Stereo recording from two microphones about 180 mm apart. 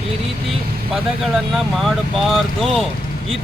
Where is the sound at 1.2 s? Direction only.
Centre (ahead or behind).